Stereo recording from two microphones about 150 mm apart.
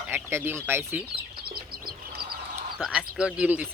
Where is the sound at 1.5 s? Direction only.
90° right.